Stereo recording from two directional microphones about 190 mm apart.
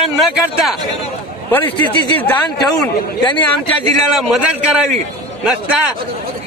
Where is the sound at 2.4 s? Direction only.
25° left (ahead or behind).